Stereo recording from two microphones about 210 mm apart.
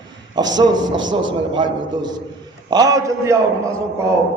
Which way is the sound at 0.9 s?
65° right (ahead or behind).